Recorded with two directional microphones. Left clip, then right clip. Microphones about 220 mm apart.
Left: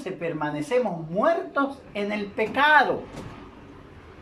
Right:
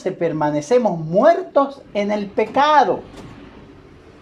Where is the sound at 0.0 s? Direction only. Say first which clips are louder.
Right 9 dB; 30° right (ahead or behind).